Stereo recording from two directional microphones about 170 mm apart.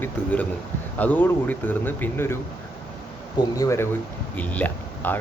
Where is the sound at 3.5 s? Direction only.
20° left (ahead or behind).